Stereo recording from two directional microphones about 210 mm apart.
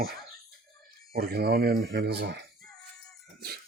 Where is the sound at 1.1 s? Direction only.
50° right (ahead or behind).